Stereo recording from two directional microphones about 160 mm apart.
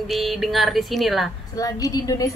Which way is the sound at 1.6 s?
20° left (ahead or behind).